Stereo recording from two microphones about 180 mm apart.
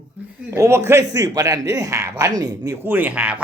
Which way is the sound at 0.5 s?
15° right (ahead or behind).